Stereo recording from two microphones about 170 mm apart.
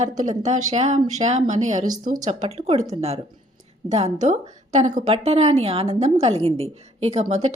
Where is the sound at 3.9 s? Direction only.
40° right (ahead or behind).